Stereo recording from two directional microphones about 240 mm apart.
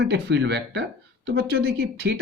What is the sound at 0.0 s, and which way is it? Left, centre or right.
Speech, right.